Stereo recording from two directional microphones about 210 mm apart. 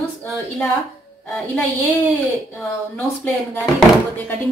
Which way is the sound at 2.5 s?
5° left (ahead or behind).